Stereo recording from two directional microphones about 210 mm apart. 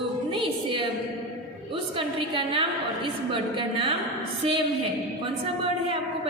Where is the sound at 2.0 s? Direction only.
25° right (ahead or behind).